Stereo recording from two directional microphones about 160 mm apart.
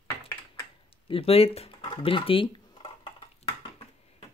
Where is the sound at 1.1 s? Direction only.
35° left (ahead or behind).